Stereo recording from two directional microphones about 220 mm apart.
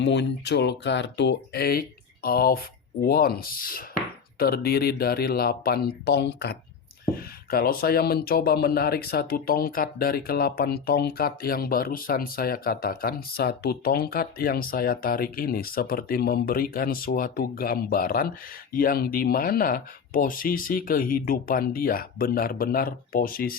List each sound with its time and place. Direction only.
0.0 s speech: 50° left (ahead or behind)